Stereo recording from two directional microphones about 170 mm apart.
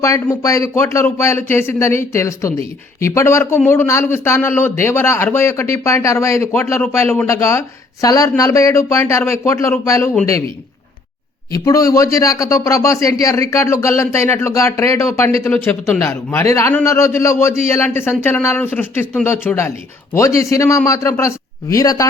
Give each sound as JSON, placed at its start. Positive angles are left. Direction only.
{"t": 0.0, "sound": "speech", "side_deg": 20}
{"t": 11.5, "sound": "a man's voice", "side_deg": 20}